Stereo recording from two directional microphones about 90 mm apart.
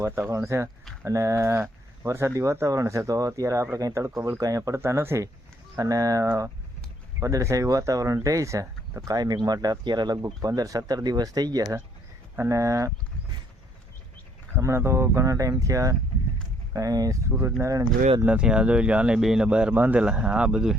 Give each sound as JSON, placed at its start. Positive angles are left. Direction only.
{"t": 0.3, "sound": "speech", "side_deg": -30}
{"t": 14.5, "sound": "speech", "side_deg": -30}
{"t": 18.2, "sound": "speech", "side_deg": -15}